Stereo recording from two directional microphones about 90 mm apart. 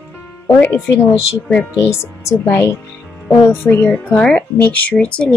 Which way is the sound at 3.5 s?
25° left (ahead or behind).